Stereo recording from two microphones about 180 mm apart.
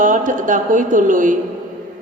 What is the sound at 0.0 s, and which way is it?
A woman's voice, 45° right (ahead or behind).